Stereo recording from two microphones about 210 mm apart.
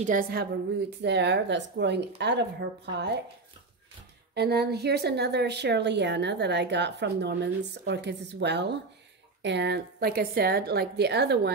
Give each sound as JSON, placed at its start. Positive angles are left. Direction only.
{"t": 0.0, "sound": "a woman's voice", "side_deg": -40}
{"t": 4.4, "sound": "a woman's voice", "side_deg": -50}